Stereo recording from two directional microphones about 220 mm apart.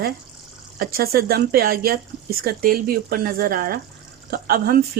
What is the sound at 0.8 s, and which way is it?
Speech, 45° right (ahead or behind).